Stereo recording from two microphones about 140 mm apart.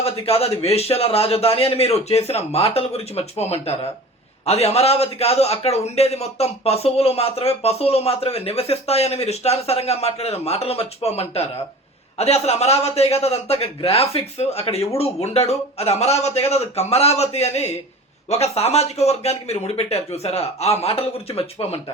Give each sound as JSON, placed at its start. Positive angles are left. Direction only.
{"t": 0.0, "sound": "a man's voice", "side_deg": 45}